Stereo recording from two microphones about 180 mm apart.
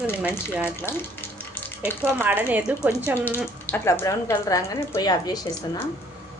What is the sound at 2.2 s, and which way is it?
Speech, 10° right (ahead or behind).